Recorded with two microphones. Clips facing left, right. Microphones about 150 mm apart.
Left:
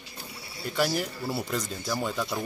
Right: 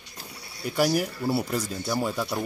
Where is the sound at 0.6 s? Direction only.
10° right (ahead or behind).